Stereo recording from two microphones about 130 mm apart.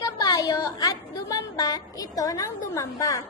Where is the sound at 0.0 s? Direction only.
30° left (ahead or behind).